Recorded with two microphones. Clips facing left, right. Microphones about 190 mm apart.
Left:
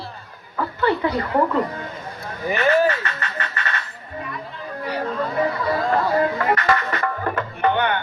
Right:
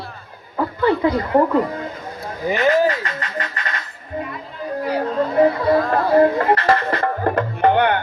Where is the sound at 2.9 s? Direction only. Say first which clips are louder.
Right 2 dB; 35° right (ahead or behind).